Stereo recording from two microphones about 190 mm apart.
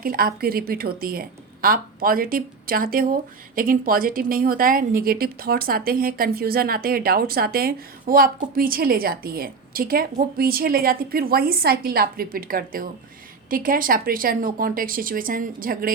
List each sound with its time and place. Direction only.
0.0 s a woman's voice: 50° right (ahead or behind)